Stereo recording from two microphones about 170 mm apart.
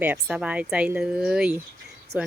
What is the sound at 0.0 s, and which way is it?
Speech, 10° right (ahead or behind).